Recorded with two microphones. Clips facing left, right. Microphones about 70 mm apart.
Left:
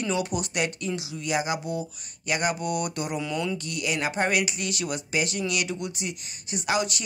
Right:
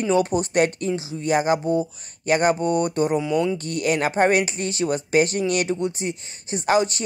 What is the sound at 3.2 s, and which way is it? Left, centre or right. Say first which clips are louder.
Speech: right 7 dB; centre.